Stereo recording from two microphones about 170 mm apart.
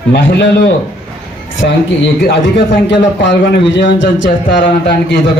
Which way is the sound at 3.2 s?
90° left.